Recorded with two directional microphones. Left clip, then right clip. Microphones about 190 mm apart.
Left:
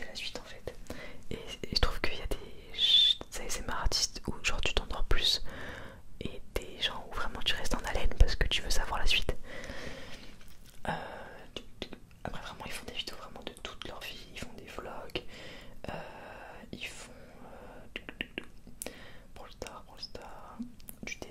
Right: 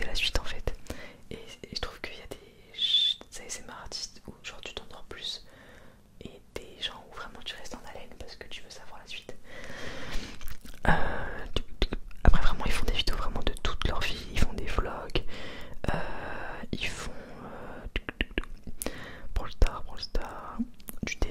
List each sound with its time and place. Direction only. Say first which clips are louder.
0.1 s whispering: right 10 dB; 45° right (ahead or behind)
0.8 s whispering: right 2 dB; 5° right (ahead or behind)
1.3 s whispering: left 5 dB; 15° left (ahead or behind)
2.7 s owl: left 1 dB; 20° left (ahead or behind)
3.4 s whispering: left 6 dB; 25° left (ahead or behind)
6.1 s whispering: left 3 dB; 15° left (ahead or behind)
8.0 s whispering: left 10 dB; 45° left (ahead or behind)
9.6 s a sound: right 1 dB; 5° right (ahead or behind)
10.8 s whispering: right 9 dB; 50° right (ahead or behind)